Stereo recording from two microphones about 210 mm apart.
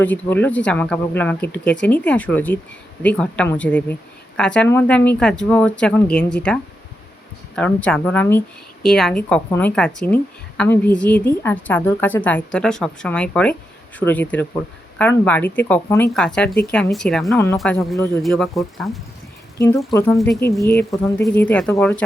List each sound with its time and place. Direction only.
0.0 s a woman's voice: 10° left (ahead or behind)
17.3 s a woman's voice: 15° left (ahead or behind)
18.2 s a woman's voice: centre (ahead or behind)
19.5 s a woman's voice: 15° left (ahead or behind)
20.1 s a woman's voice: centre (ahead or behind)
20.7 s a woman's voice: 15° left (ahead or behind)